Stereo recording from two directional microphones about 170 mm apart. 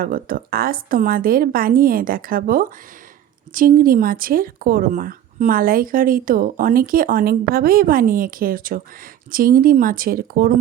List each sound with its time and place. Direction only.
0.0 s speech: 60° right (ahead or behind)